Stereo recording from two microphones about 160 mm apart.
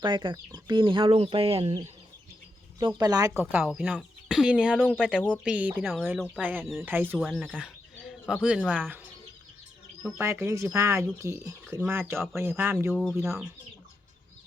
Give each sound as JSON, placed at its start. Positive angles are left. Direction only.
{"t": 0.0, "sound": "speech", "side_deg": -30}
{"t": 2.7, "sound": "speech", "side_deg": -25}
{"t": 3.5, "sound": "speech", "side_deg": -5}
{"t": 7.3, "sound": "speech", "side_deg": 0}
{"t": 7.5, "sound": "bird", "side_deg": -5}
{"t": 8.7, "sound": "speech", "side_deg": -10}
{"t": 10.2, "sound": "speech", "side_deg": -15}
{"t": 12.9, "sound": "speech", "side_deg": 0}